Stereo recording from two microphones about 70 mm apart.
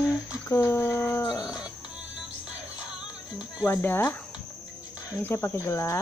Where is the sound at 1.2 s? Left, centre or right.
Left.